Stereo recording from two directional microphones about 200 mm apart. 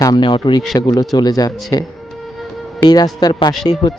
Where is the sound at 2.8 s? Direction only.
20° left (ahead or behind).